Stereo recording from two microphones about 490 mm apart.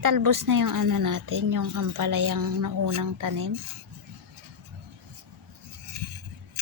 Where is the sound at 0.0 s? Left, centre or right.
Right.